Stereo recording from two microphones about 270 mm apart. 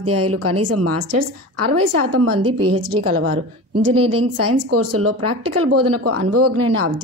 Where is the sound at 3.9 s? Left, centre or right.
Right.